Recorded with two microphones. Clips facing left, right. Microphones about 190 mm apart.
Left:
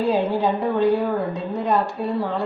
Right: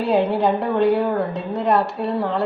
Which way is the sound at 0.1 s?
65° right (ahead or behind).